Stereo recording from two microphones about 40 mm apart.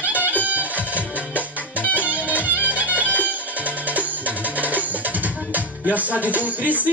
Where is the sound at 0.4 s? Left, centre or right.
Right.